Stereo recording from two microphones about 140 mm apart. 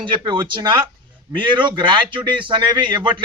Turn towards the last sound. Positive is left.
turn(degrees=-35)  # may be behind; listen again after turning